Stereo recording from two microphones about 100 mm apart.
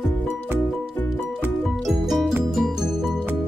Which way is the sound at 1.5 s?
Centre (ahead or behind).